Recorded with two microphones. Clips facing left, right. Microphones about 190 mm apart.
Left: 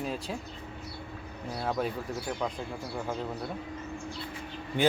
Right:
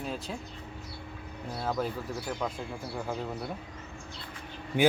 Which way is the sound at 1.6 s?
Centre (ahead or behind).